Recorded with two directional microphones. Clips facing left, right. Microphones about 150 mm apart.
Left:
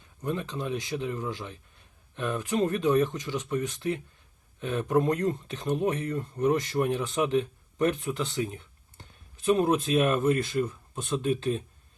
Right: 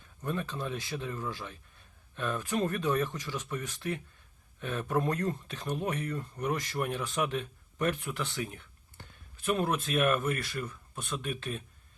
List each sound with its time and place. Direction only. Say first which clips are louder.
0.2 s speech: left 3 dB; 20° left (ahead or behind)